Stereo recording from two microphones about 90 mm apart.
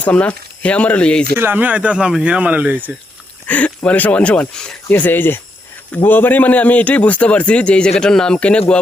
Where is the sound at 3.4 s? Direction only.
15° left (ahead or behind).